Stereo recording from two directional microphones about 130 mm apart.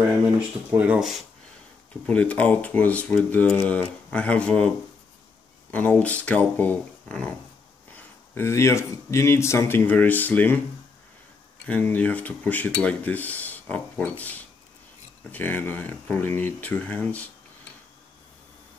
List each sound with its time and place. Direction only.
0.7 s speech: 10° right (ahead or behind)
2.0 s speech: 10° left (ahead or behind)
5.7 s speech: 10° left (ahead or behind)
7.9 s speech: 20° left (ahead or behind)
11.6 s speech: 15° left (ahead or behind)